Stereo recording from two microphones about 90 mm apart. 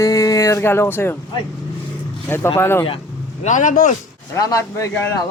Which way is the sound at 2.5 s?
25° left (ahead or behind).